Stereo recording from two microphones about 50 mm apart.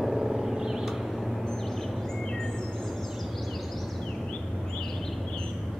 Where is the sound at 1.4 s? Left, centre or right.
Centre.